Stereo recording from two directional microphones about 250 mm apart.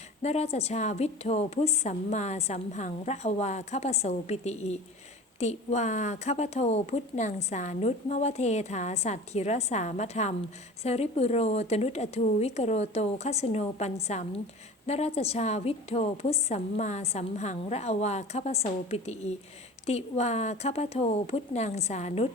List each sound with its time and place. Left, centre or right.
0.2 s a woman's voice: left